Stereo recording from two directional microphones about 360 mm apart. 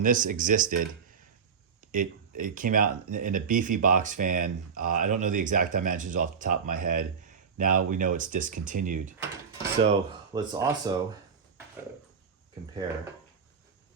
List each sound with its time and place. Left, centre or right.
0.0 s speech: right